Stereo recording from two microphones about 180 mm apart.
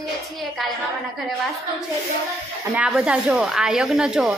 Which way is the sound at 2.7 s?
5° right (ahead or behind).